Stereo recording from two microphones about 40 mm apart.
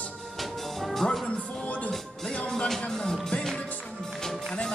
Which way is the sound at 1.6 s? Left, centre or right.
Left.